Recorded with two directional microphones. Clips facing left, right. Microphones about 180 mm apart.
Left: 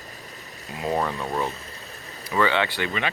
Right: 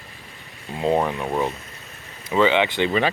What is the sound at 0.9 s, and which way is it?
Speech, 15° right (ahead or behind).